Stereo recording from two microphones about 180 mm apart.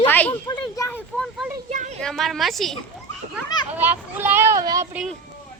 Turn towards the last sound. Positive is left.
turn(degrees=-20)  # may be behind; listen again after turning